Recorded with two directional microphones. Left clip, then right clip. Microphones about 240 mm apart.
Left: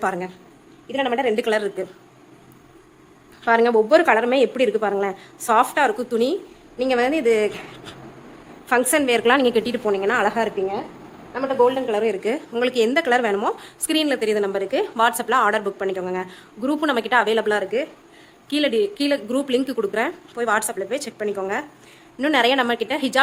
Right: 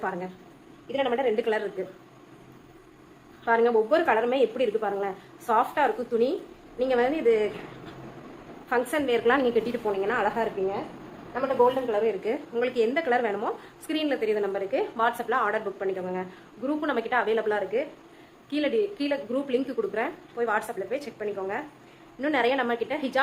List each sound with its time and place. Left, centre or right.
0.0 s a man's voice: left
3.4 s a woman's voice: left
8.7 s a woman's voice: left
11.6 s a woman's voice: left